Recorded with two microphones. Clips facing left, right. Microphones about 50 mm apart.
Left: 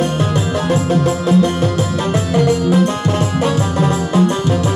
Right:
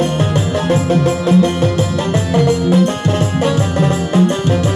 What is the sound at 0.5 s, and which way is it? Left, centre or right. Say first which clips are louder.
Music: right 2 dB; right.